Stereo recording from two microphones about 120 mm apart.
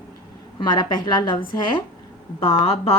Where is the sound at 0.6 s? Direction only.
35° left (ahead or behind).